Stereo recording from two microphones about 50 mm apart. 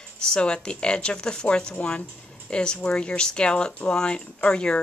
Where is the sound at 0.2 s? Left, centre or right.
Centre.